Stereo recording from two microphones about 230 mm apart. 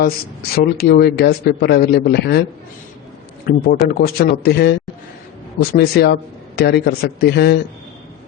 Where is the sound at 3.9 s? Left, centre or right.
Left.